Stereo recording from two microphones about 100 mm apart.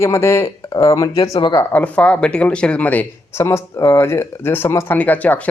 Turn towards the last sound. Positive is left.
turn(degrees=15)  # may be behind; listen again after turning